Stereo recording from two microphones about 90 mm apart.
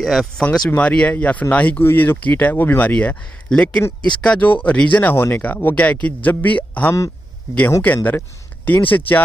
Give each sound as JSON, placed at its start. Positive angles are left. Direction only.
{"t": 0.0, "sound": "speech", "side_deg": 0}
{"t": 0.5, "sound": "speech", "side_deg": 15}